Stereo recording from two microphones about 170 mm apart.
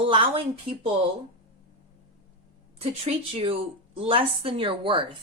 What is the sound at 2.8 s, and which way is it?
A woman's voice, 35° right (ahead or behind).